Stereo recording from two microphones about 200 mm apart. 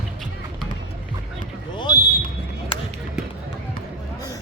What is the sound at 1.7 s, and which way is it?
Basketball bounce, 20° left (ahead or behind).